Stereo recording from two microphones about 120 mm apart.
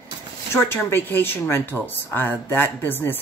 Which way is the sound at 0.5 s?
20° left (ahead or behind).